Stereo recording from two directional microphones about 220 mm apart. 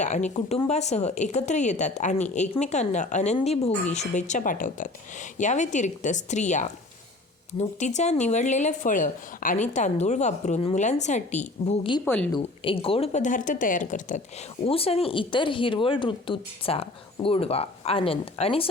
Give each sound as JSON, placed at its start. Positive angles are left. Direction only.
{"t": 0.0, "sound": "speech", "side_deg": 35}
{"t": 7.8, "sound": "speech", "side_deg": 30}
{"t": 12.0, "sound": "a woman's voice", "side_deg": 5}
{"t": 12.3, "sound": "speech", "side_deg": 25}